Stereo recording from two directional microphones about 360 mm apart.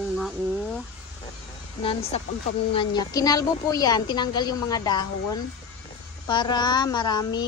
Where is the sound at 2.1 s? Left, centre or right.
Centre.